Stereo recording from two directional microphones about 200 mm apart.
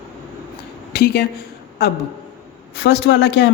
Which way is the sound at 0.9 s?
50° left (ahead or behind).